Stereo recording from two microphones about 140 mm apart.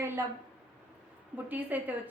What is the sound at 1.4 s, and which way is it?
Speech, 10° right (ahead or behind).